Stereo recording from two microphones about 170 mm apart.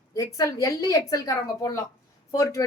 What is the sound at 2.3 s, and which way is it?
Speech, 20° left (ahead or behind).